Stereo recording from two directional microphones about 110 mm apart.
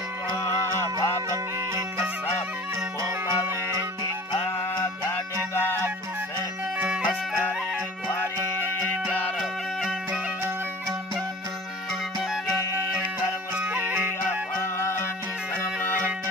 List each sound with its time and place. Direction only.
0.9 s music: 30° right (ahead or behind)
4.3 s music: 40° left (ahead or behind)
6.8 s music: 10° right (ahead or behind)
9.4 s music: centre (ahead or behind)
13.6 s music: 15° right (ahead or behind)
14.6 s music: 25° left (ahead or behind)